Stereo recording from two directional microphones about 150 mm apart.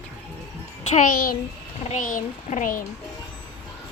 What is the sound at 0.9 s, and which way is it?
A child's voice, 60° left (ahead or behind).